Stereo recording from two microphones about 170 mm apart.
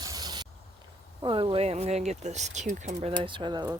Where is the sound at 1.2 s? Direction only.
25° right (ahead or behind).